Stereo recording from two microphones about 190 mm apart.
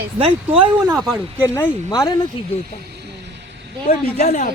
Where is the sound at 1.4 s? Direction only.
20° left (ahead or behind).